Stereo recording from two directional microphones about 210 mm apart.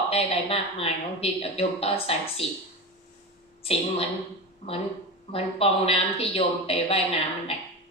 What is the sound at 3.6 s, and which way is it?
Speech, 30° left (ahead or behind).